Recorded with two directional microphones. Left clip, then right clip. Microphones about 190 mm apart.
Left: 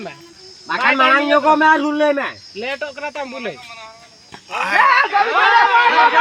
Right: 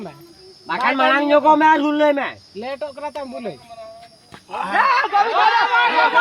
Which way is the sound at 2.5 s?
90° right.